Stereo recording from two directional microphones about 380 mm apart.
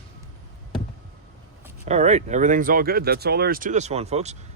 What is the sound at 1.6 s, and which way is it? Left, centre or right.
Speech, centre.